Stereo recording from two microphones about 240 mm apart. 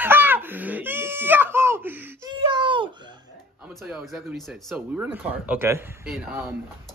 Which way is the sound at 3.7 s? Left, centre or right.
Centre.